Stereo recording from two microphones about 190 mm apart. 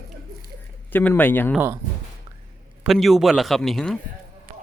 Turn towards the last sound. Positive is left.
turn(degrees=0)  # may be behind; listen again after turning